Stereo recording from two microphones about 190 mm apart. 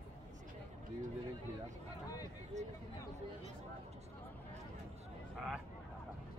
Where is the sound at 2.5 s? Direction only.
40° right (ahead or behind).